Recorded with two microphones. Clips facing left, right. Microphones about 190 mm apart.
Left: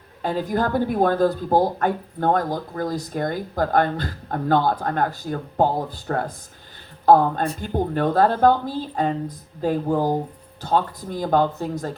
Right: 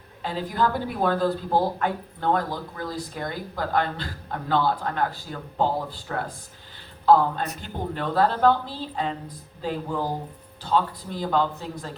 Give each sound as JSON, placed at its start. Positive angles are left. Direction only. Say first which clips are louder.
{"t": 0.2, "sound": "speech", "louder": "left 3 dB", "side_deg": 50}